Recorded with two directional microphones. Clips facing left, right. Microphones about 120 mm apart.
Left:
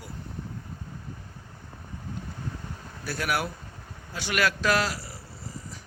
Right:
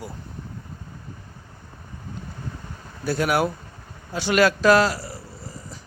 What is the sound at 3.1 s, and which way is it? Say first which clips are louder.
A man's voice: right 8 dB; 25° right (ahead or behind).